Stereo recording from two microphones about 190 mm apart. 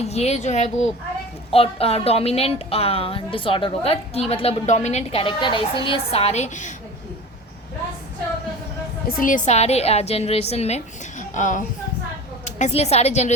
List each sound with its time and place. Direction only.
0.0 s speech: 35° left (ahead or behind)
9.0 s speech: 45° left (ahead or behind)